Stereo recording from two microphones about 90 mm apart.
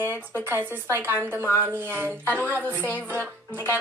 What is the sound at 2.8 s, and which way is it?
Music, 15° left (ahead or behind).